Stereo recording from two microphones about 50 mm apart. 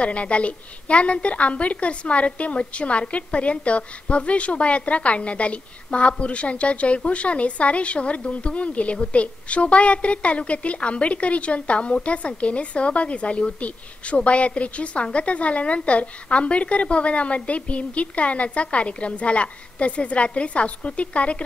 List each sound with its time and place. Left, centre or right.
0.0 s a woman's voice: left